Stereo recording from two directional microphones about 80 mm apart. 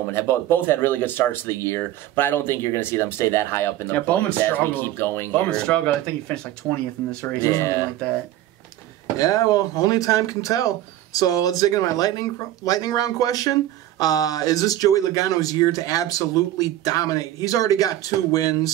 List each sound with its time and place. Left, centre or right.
0.0 s speech: left
5.5 s speech: centre
7.4 s speech: left
9.2 s speech: left